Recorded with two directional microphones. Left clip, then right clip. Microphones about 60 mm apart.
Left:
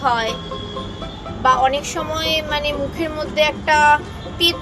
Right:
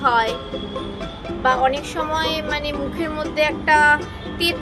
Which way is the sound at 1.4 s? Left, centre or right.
Right.